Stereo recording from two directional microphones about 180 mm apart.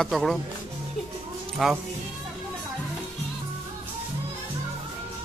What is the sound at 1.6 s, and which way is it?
Speech, centre (ahead or behind).